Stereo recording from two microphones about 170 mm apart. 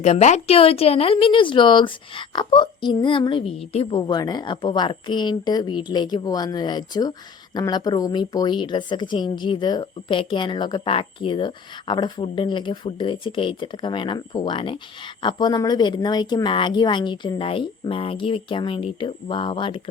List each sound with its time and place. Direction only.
0.0 s speech: 40° left (ahead or behind)